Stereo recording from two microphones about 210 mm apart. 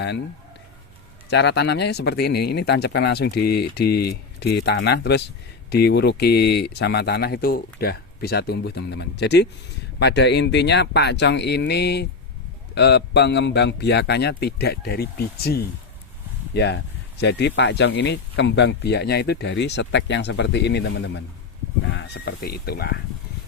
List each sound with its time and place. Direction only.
1.3 s speech: 55° left (ahead or behind)